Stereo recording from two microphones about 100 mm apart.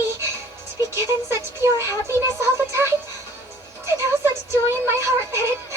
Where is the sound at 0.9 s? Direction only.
25° right (ahead or behind).